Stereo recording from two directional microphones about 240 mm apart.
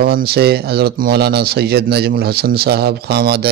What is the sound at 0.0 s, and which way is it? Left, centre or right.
A man's voice, right.